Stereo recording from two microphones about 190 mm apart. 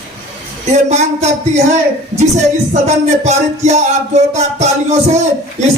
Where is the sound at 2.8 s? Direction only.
35° right (ahead or behind).